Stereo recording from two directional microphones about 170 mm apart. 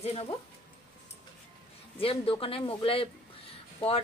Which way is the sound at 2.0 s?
35° left (ahead or behind).